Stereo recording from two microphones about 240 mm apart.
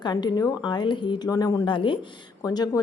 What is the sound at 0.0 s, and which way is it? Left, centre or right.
A woman's voice, centre.